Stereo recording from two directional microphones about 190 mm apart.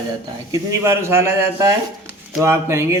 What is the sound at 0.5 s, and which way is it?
Speech, 15° right (ahead or behind).